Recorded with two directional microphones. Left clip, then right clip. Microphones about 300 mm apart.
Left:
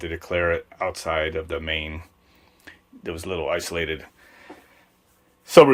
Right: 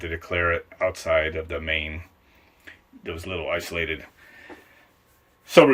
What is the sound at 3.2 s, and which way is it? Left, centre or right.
Speech, centre.